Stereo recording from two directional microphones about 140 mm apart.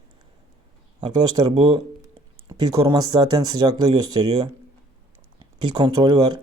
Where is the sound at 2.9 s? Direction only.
25° right (ahead or behind).